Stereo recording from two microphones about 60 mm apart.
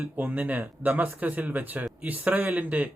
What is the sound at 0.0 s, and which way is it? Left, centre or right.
Speech, right.